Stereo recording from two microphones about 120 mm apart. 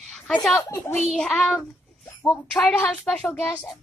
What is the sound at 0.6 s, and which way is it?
Speech, 20° left (ahead or behind).